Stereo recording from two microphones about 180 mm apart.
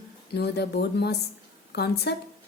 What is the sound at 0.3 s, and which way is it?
A woman's voice, 65° left (ahead or behind).